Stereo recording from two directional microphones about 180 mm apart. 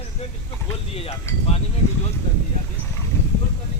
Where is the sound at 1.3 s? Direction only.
15° left (ahead or behind).